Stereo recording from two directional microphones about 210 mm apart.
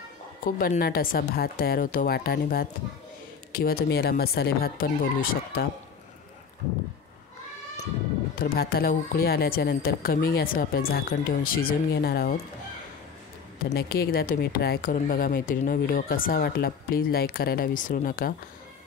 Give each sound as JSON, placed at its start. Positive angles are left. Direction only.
{"t": 0.5, "sound": "a woman's voice", "side_deg": 45}
{"t": 8.4, "sound": "a woman's voice", "side_deg": 45}
{"t": 13.7, "sound": "a woman's voice", "side_deg": 45}